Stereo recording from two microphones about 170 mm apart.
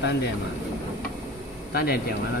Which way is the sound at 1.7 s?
60° left (ahead or behind).